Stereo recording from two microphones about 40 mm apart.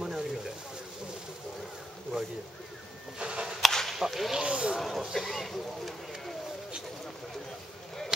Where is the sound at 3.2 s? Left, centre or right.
Right.